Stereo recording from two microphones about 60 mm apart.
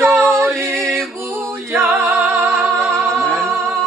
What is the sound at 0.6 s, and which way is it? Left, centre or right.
Music, right.